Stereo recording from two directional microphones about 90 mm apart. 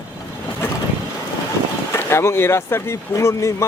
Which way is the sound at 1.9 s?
30° left (ahead or behind).